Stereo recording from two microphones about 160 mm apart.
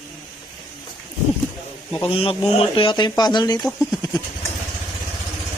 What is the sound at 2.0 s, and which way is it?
A man's voice, 35° left (ahead or behind).